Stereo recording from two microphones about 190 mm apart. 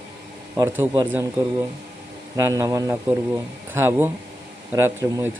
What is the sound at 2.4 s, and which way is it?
Speech, 15° right (ahead or behind).